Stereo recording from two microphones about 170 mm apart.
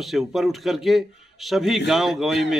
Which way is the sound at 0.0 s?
Centre (ahead or behind).